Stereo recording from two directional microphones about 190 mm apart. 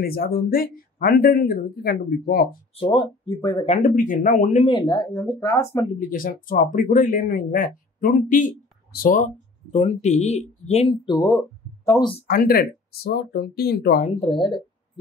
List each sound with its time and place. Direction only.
0.0 s speech: 50° left (ahead or behind)
2.7 s speech: 25° left (ahead or behind)
3.6 s speech: 40° left (ahead or behind)
4.6 s speech: 20° left (ahead or behind)
5.9 s speech: 45° left (ahead or behind); by 12.1 s 15° left (ahead or behind)
12.3 s speech: 50° left (ahead or behind)
14.0 s speech: 30° left (ahead or behind)